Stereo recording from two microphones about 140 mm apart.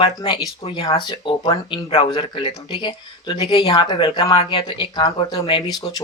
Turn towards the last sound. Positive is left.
turn(degrees=30)  # may be behind; listen again after turning